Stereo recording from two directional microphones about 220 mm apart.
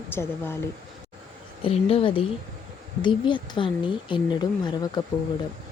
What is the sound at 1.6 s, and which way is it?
Speech, 25° left (ahead or behind).